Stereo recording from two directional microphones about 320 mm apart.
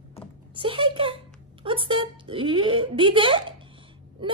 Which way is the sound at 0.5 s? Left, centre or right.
Centre.